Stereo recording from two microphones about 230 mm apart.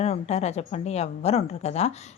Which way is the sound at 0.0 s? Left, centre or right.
Left.